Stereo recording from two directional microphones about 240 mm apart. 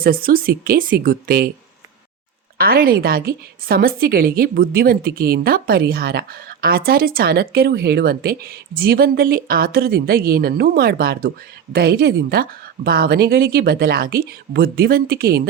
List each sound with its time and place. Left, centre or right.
0.0 s a woman's voice: right
2.6 s a woman's voice: right